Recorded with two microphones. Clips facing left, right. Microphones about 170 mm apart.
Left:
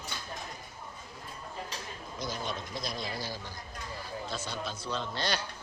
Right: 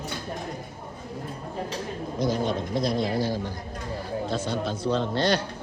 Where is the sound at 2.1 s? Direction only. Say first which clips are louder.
Right 11 dB; 60° right (ahead or behind).